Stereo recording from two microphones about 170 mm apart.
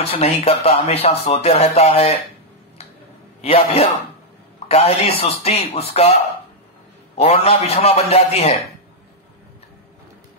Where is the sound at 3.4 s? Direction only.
35° left (ahead or behind).